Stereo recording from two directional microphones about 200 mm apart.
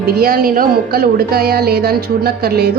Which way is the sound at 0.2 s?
45° right (ahead or behind).